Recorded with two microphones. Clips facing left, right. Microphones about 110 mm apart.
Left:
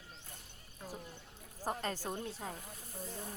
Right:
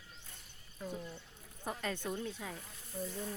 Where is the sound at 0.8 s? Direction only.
25° left (ahead or behind).